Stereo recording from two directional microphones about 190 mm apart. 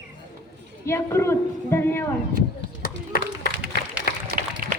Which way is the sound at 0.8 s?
15° left (ahead or behind).